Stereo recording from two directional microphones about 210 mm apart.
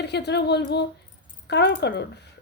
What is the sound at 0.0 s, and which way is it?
Speech, 55° left (ahead or behind).